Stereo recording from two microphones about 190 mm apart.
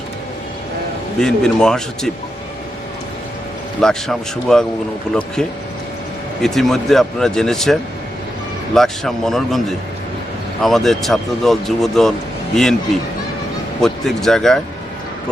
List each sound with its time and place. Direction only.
1.2 s speech: 5° left (ahead or behind)
3.8 s speech: centre (ahead or behind)
6.4 s speech: centre (ahead or behind)